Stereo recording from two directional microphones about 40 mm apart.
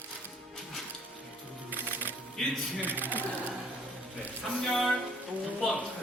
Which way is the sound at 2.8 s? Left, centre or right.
Right.